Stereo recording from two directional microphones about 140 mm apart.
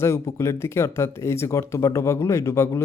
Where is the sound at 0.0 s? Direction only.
20° left (ahead or behind).